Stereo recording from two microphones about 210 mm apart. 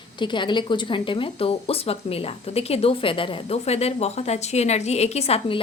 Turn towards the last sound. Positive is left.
turn(degrees=30)  # may be behind; listen again after turning